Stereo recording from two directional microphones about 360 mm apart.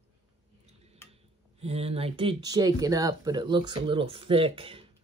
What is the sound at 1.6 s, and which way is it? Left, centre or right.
Speech, centre.